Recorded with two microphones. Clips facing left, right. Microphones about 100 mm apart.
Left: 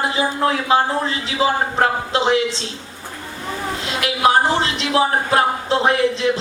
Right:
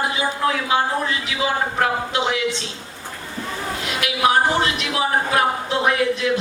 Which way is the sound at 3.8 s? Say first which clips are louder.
Left 2 dB; 30° left (ahead or behind).